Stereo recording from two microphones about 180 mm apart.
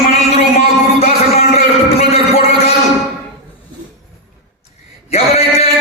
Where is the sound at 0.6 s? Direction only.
35° left (ahead or behind).